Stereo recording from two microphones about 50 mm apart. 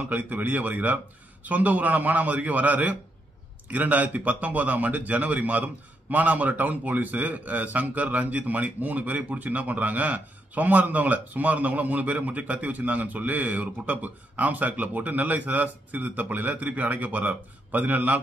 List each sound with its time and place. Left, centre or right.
0.0 s a man's voice: right